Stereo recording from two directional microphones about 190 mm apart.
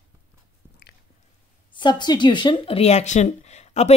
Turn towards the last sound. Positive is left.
turn(degrees=35)  # may be behind; listen again after turning